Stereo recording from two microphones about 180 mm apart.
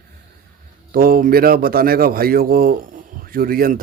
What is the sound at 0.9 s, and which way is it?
A man's voice, 55° right (ahead or behind).